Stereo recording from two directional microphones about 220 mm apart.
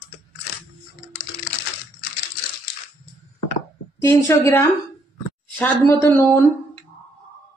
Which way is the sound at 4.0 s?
15° left (ahead or behind).